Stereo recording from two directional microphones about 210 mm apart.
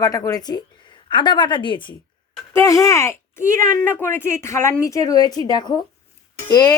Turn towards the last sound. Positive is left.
turn(degrees=20)  # may be behind; listen again after turning